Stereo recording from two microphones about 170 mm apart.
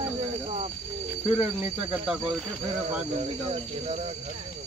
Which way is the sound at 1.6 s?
5° right (ahead or behind).